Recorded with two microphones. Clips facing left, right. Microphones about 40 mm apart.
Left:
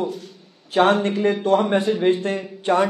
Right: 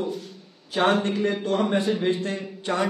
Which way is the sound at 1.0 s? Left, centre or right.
Left.